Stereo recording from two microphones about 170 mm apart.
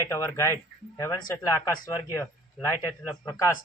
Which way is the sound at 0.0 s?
15° left (ahead or behind).